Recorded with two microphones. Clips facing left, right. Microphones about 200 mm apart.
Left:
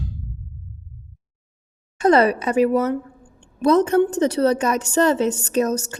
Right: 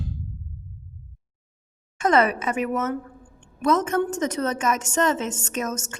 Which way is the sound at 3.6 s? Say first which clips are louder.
Left 6 dB; 35° left (ahead or behind).